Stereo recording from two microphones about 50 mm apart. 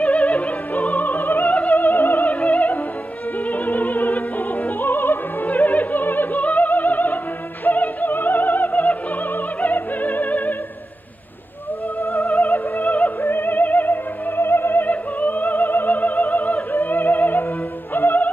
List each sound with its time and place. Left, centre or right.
0.0 s opera: left
1.6 s music: left
3.3 s opera: left
12.2 s music: left